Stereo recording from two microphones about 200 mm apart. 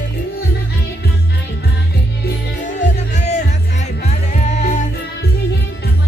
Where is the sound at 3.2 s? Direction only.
35° left (ahead or behind).